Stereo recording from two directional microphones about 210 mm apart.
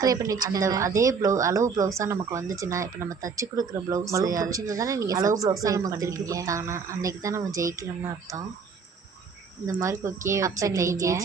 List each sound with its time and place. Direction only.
0.0 s a woman's voice: 15° right (ahead or behind)
9.6 s a woman's voice: 15° right (ahead or behind)